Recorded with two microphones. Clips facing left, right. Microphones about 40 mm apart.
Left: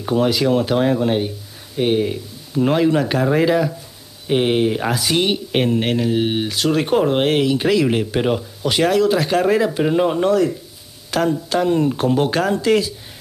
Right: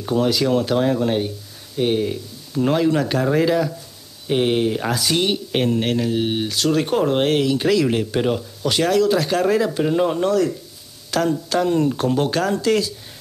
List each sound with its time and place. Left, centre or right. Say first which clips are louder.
0.0 s speech: left 2 dB; centre